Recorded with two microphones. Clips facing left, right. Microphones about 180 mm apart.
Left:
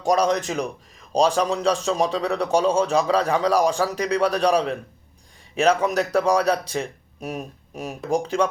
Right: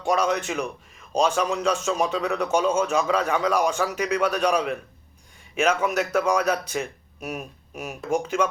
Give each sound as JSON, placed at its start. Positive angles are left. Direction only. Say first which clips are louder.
{"t": 0.0, "sound": "a man's voice", "louder": "left 3 dB", "side_deg": 40}